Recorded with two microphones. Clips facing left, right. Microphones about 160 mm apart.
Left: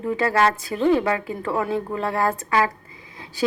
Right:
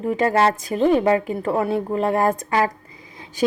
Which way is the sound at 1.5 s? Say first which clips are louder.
Right 3 dB; 35° right (ahead or behind).